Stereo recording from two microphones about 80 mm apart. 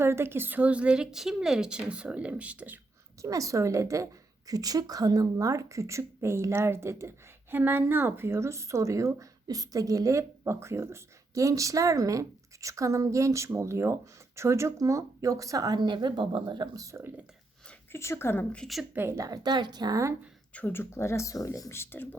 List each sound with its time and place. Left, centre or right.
0.0 s a woman's voice: right
3.2 s speech: right
15.8 s speech: right
16.7 s speech: right
17.9 s speech: left
18.9 s a woman's voice: right
20.5 s speech: left
20.9 s speech: left